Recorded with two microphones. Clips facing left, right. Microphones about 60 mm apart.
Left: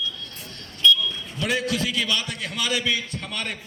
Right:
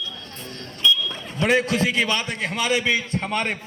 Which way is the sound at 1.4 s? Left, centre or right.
Right.